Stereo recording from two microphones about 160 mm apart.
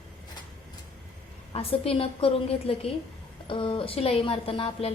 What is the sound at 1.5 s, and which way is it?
A woman's voice, 35° left (ahead or behind).